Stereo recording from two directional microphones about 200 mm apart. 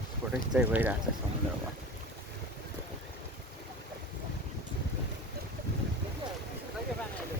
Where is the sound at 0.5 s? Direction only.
10° right (ahead or behind).